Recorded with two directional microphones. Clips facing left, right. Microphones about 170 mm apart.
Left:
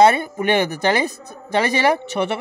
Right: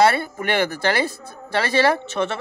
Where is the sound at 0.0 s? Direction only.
20° left (ahead or behind).